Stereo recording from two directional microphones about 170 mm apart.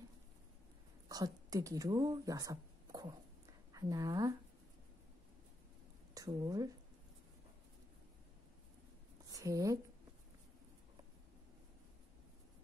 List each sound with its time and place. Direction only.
1.0 s a woman's voice: 20° right (ahead or behind)
6.1 s a woman's voice: 20° right (ahead or behind)
9.3 s a woman's voice: 20° right (ahead or behind)